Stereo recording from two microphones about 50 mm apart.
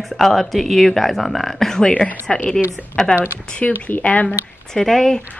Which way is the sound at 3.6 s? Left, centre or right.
Left.